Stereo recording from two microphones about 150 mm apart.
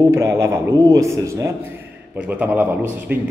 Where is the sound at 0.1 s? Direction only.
20° right (ahead or behind).